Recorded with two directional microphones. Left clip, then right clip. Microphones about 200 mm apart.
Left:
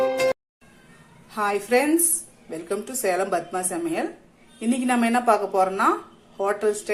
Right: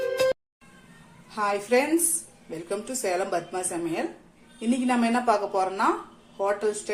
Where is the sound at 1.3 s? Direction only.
25° left (ahead or behind).